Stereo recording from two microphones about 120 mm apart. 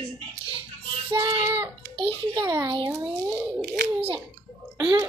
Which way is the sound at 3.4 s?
25° right (ahead or behind).